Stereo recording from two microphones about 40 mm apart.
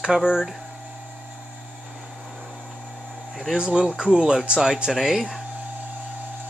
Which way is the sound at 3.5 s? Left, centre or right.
Right.